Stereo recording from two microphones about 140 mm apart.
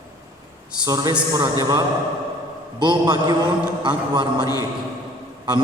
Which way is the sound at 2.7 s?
30° right (ahead or behind).